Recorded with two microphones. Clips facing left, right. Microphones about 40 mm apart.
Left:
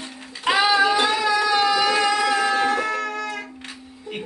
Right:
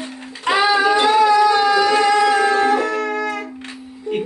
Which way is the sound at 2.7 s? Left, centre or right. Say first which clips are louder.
Right 5 dB; centre.